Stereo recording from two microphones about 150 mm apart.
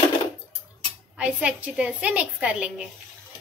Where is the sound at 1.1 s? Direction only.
10° right (ahead or behind).